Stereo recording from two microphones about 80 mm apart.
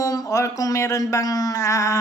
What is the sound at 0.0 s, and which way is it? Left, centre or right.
Speech, left.